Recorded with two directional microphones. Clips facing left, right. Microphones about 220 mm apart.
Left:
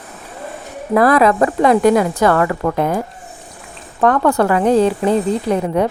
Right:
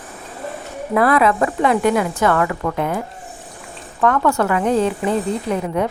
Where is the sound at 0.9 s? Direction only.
40° left (ahead or behind).